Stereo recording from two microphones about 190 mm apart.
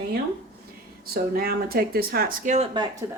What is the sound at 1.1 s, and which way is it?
Speech, 55° right (ahead or behind).